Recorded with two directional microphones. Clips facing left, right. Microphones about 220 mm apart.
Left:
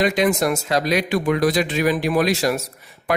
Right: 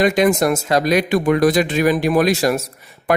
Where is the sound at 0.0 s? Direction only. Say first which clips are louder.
Right 4 dB; 50° right (ahead or behind).